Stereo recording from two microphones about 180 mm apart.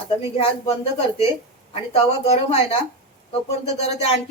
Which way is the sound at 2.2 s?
35° left (ahead or behind).